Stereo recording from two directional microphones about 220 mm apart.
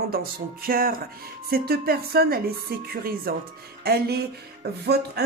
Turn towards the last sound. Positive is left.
turn(degrees=-45)  # may be behind; listen again after turning